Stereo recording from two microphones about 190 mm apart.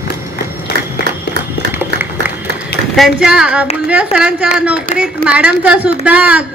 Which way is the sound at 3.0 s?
5° right (ahead or behind).